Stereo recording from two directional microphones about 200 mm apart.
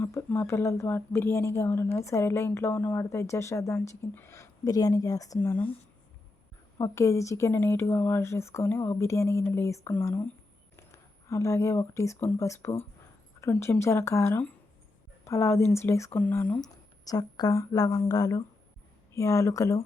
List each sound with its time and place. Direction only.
0.0 s a woman's voice: 10° left (ahead or behind)
6.7 s a woman's voice: 15° left (ahead or behind)